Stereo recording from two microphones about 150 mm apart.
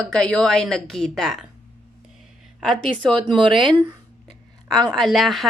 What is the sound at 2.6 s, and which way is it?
Speech, 5° left (ahead or behind).